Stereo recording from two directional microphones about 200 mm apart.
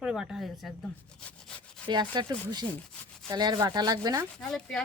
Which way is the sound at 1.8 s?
20° right (ahead or behind).